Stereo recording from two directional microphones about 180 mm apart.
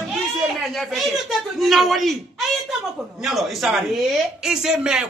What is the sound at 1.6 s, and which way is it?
A man's voice, centre (ahead or behind).